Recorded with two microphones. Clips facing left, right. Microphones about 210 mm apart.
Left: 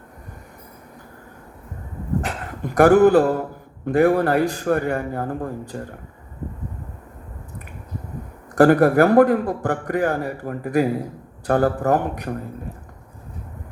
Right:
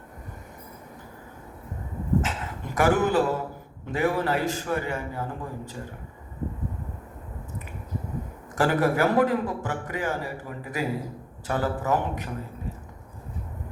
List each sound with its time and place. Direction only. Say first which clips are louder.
2.2 s a man's voice: left 4 dB; 50° left (ahead or behind)
8.5 s a man's voice: left 9 dB; 55° left (ahead or behind)